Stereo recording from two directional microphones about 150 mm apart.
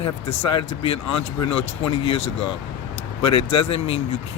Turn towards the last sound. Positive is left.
turn(degrees=40)  # may be behind; listen again after turning